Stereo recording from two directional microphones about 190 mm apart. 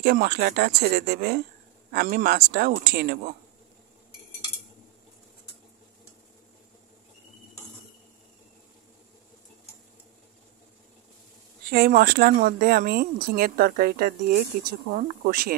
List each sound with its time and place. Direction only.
0.0 s speech: 55° right (ahead or behind)
11.7 s speech: 55° right (ahead or behind)